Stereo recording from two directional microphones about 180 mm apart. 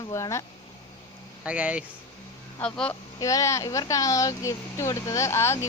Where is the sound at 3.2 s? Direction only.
20° left (ahead or behind).